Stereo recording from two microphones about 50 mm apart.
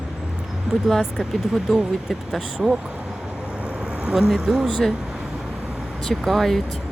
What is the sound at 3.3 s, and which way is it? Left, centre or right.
Vehicle, right.